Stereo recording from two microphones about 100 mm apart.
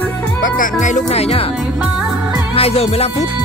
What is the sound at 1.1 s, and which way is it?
Speech, 90° left.